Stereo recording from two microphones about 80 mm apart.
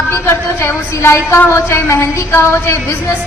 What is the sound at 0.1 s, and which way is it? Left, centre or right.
A woman's voice, left.